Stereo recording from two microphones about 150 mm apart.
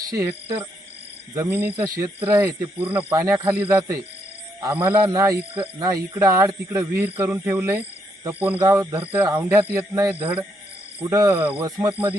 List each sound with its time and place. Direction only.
0.1 s speech: 20° right (ahead or behind)
1.4 s speech: 15° right (ahead or behind)
2.0 s speech: 30° right (ahead or behind)
2.4 s speech: 15° right (ahead or behind)
5.0 s speech: 25° right (ahead or behind)